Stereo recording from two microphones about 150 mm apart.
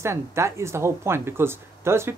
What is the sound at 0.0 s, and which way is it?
Speech, 15° right (ahead or behind).